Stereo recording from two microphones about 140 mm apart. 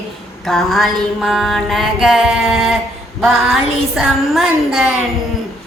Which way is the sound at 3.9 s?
Centre (ahead or behind).